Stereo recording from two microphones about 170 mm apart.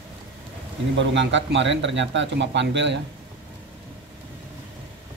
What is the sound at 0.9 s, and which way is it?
Speech, 90° right.